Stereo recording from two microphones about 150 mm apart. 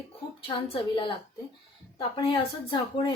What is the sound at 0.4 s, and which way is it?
Speech, 35° left (ahead or behind).